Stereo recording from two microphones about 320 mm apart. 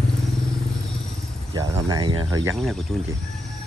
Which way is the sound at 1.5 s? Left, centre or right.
Centre.